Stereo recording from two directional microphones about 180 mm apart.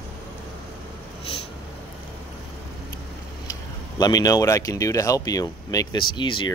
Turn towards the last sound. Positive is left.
turn(degrees=25)  # may be behind; listen again after turning